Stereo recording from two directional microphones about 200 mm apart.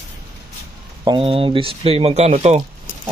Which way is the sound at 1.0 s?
25° right (ahead or behind).